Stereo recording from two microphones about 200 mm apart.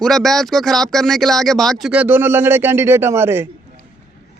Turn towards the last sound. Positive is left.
turn(degrees=-10)  # may be behind; listen again after turning